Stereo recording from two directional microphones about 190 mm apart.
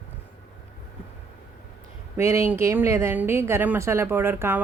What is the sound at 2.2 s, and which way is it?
A woman's voice, 15° right (ahead or behind).